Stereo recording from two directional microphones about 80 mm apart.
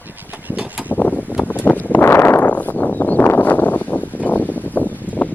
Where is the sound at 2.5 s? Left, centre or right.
Left.